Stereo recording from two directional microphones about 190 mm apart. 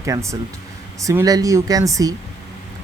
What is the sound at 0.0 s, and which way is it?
Speech, 15° right (ahead or behind).